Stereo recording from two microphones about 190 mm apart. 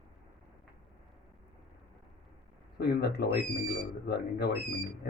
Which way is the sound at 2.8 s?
55° left (ahead or behind).